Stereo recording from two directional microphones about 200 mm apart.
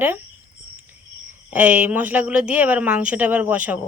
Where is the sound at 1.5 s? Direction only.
5° right (ahead or behind).